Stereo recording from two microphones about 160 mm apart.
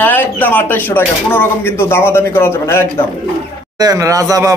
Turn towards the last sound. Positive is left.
turn(degrees=-20)  # may be behind; listen again after turning